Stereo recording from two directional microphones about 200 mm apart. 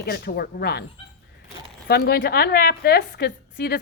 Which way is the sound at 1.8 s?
50° left (ahead or behind).